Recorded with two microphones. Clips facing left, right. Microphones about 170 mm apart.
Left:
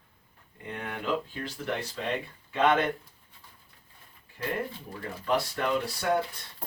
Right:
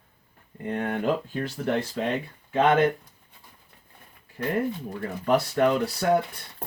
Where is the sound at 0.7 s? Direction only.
45° right (ahead or behind).